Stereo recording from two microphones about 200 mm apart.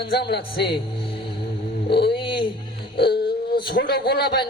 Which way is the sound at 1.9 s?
55° left (ahead or behind).